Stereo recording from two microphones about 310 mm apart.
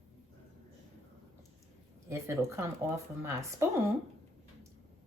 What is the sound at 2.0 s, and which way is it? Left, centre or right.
Speech, centre.